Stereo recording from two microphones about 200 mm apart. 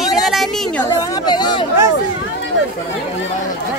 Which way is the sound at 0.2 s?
Centre (ahead or behind).